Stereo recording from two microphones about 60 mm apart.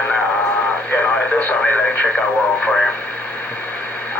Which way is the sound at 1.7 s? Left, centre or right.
Left.